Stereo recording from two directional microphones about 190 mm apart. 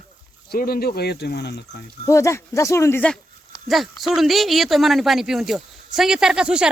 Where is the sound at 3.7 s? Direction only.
Centre (ahead or behind).